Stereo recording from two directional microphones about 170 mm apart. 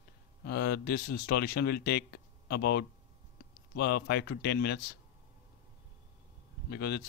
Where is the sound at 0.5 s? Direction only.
70° left (ahead or behind).